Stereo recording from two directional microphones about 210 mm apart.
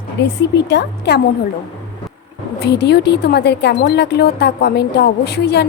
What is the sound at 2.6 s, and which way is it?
A woman's voice, 50° left (ahead or behind).